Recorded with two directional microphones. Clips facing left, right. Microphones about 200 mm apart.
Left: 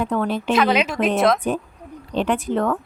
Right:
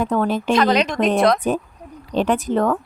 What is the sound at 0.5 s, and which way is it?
Speech, 5° left (ahead or behind).